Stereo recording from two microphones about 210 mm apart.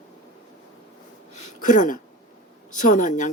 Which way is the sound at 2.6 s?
35° left (ahead or behind).